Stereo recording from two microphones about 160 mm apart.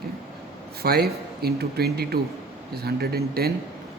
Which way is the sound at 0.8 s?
80° right.